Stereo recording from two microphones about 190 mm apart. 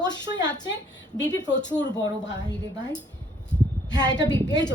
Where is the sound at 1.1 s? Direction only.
70° left (ahead or behind).